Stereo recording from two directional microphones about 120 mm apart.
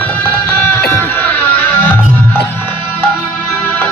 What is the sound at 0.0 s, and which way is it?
Music, 20° left (ahead or behind).